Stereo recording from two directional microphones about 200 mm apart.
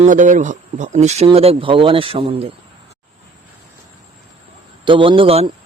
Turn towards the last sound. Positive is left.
turn(degrees=-30)  # may be behind; listen again after turning